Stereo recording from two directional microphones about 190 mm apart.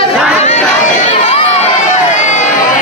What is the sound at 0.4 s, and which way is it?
Crowd, 35° left (ahead or behind).